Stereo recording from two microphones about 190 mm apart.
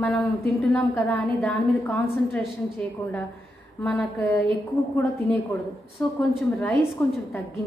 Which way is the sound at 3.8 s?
5° left (ahead or behind).